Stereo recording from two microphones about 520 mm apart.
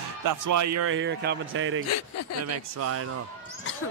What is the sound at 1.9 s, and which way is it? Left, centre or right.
Speech, left.